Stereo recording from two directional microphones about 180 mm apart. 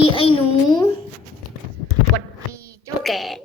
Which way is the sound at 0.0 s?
30° left (ahead or behind).